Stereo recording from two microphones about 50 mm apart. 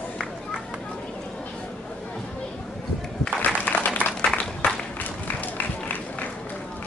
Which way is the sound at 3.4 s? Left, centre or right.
Left.